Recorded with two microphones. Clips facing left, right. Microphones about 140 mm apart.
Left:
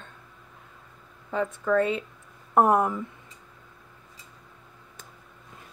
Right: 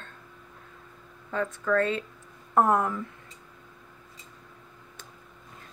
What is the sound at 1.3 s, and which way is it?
Speech, 10° left (ahead or behind).